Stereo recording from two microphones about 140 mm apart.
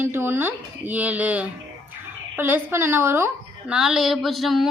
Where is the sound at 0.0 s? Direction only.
15° right (ahead or behind).